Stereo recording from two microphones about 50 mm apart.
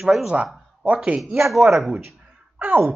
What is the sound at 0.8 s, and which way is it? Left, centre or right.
Speech, right.